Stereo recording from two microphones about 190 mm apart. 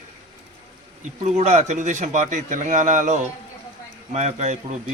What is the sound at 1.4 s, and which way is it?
A man's voice, 35° right (ahead or behind).